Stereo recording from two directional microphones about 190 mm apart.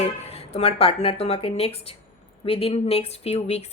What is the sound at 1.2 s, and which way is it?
A woman's voice, 30° left (ahead or behind).